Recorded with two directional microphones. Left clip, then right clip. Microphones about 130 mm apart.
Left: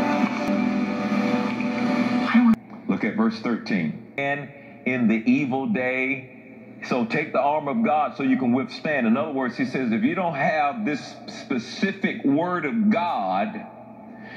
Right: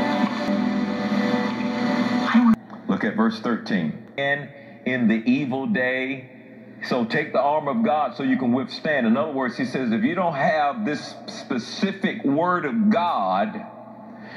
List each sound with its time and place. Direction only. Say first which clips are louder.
0.0 s music: even; centre (ahead or behind)
4.8 s a man's voice: even; 10° right (ahead or behind)